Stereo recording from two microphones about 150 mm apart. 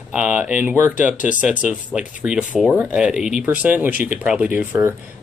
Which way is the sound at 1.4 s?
5° right (ahead or behind).